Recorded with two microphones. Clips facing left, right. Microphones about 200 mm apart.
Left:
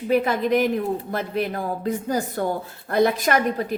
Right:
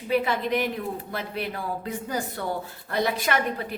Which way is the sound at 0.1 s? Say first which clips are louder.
Left 4 dB; 45° left (ahead or behind).